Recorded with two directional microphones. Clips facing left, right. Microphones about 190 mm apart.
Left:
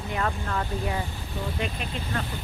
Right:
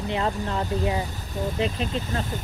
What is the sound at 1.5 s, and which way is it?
Speech, 30° right (ahead or behind).